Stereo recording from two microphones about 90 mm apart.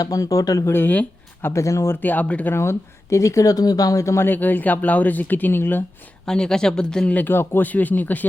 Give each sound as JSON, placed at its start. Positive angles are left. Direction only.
{"t": 0.0, "sound": "speech", "side_deg": 40}
{"t": 0.7, "sound": "speech", "side_deg": 20}
{"t": 2.0, "sound": "speech", "side_deg": 20}
{"t": 4.3, "sound": "speech", "side_deg": 20}
{"t": 6.2, "sound": "speech", "side_deg": 10}